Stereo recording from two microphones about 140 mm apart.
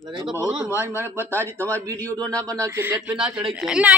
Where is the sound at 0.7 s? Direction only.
20° left (ahead or behind).